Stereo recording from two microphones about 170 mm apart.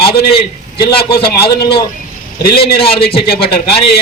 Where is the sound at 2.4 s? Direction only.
65° left (ahead or behind).